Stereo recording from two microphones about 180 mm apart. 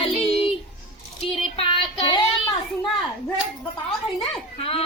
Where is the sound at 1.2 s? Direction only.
30° left (ahead or behind).